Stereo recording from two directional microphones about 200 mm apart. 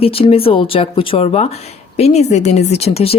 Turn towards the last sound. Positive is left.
turn(degrees=30)  # may be behind; listen again after turning